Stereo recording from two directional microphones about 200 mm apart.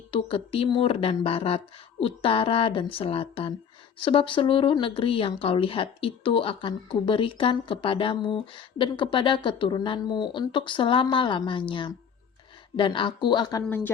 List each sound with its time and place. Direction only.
0.1 s speech: 25° left (ahead or behind); by 13.9 s 10° left (ahead or behind)